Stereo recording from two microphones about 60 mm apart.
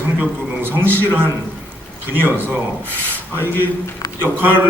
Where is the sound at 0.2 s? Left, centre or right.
Right.